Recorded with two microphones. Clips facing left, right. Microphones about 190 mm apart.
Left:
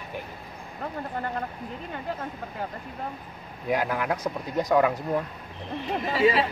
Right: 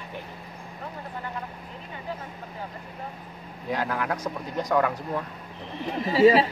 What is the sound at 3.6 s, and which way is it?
Speech, 15° left (ahead or behind).